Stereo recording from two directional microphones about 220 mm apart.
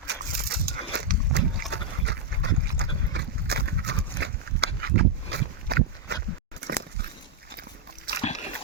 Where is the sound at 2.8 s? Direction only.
45° right (ahead or behind).